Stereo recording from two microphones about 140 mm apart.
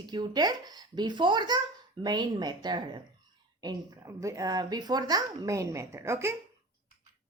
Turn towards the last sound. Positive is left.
turn(degrees=-20)  # may be behind; listen again after turning